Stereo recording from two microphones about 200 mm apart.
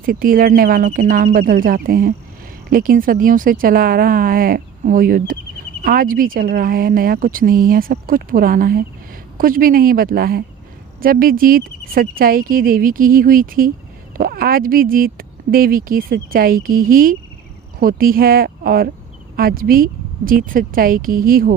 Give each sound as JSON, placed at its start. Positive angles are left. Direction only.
{"t": 0.0, "sound": "speech", "side_deg": -45}